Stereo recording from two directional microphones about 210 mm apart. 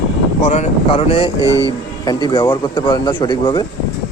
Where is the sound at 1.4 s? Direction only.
15° right (ahead or behind).